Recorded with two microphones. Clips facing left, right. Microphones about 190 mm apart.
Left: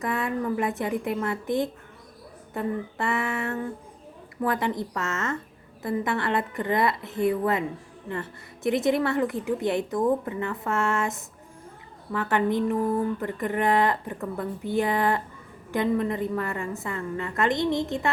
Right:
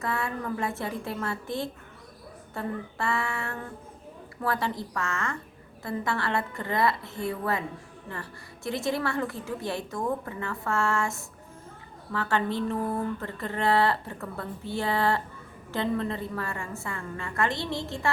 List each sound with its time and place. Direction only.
0.0 s a woman's voice: 20° left (ahead or behind)